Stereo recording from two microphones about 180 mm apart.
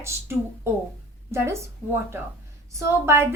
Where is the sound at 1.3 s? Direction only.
15° right (ahead or behind).